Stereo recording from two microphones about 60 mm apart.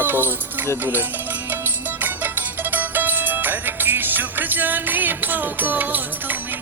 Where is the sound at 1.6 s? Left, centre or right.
Right.